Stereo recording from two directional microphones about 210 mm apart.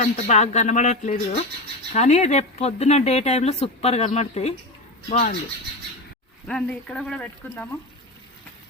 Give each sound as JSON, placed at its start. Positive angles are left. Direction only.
{"t": 0.0, "sound": "speech", "side_deg": 35}
{"t": 6.5, "sound": "speech", "side_deg": 5}